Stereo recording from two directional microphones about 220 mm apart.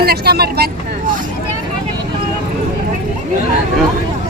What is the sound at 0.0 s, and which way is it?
Vehicle, 45° right (ahead or behind).